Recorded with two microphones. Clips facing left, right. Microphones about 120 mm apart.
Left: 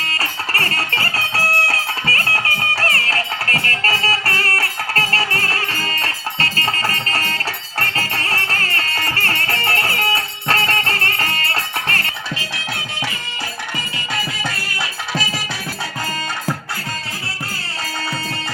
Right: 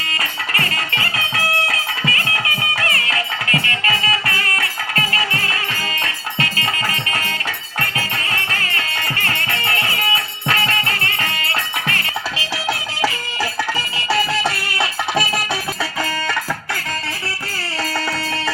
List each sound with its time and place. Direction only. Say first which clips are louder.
0.1 s music: even; 35° left (ahead or behind)
14.1 s music: right 7 dB; 70° right (ahead or behind)
16.0 s music: right 3 dB; 90° right